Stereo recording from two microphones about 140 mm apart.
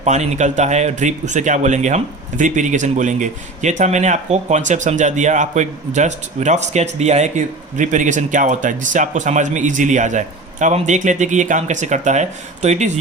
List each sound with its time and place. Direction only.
0.0 s a man's voice: 55° right (ahead or behind)